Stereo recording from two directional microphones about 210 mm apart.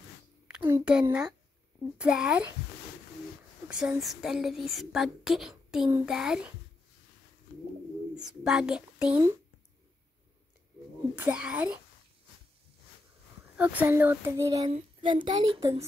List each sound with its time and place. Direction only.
0.5 s speech: 10° right (ahead or behind)
3.6 s speech: 5° right (ahead or behind)
5.9 s speech: 10° right (ahead or behind)
8.2 s speech: centre (ahead or behind)
11.1 s speech: 5° right (ahead or behind)
13.6 s speech: 10° right (ahead or behind); by 15.8 s 25° right (ahead or behind)